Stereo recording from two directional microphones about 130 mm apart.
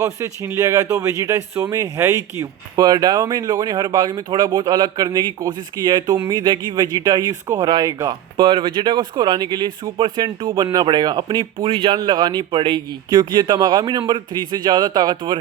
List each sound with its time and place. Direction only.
0.0 s speech: 25° right (ahead or behind)
8.4 s speech: 40° right (ahead or behind)